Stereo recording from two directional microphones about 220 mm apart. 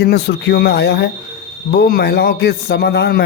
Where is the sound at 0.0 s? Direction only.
50° left (ahead or behind).